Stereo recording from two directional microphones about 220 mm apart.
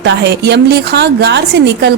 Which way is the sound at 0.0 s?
50° right (ahead or behind).